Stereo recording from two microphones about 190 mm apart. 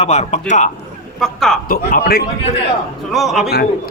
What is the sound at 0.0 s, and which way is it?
Speech, 35° left (ahead or behind).